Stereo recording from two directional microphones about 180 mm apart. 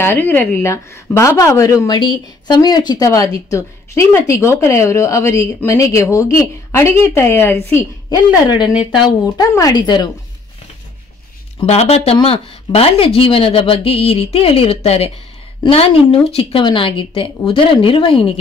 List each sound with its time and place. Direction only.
0.0 s speech: 10° left (ahead or behind)
9.2 s a woman's voice: 20° left (ahead or behind)
11.6 s a woman's voice: 35° left (ahead or behind)